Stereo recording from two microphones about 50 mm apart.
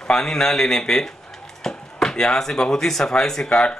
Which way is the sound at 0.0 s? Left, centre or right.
Centre.